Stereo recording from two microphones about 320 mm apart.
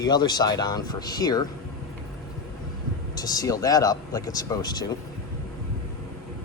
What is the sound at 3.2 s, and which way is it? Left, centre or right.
Speech, centre.